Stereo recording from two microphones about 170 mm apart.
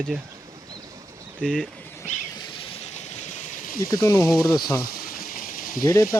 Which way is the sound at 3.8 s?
20° left (ahead or behind).